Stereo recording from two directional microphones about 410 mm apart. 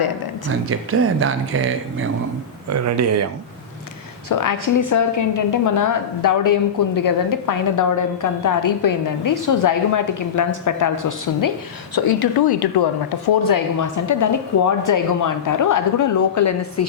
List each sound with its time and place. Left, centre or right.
0.7 s speech: right
4.3 s a woman's voice: left
11.9 s speech: left
13.7 s a woman's voice: left